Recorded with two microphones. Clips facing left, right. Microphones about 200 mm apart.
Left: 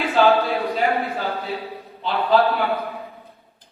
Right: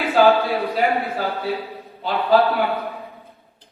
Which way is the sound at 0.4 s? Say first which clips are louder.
Right 1 dB; centre (ahead or behind).